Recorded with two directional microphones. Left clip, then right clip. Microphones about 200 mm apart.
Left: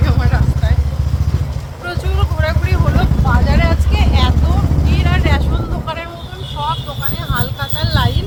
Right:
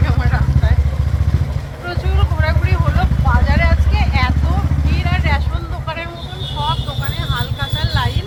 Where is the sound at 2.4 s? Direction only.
20° left (ahead or behind).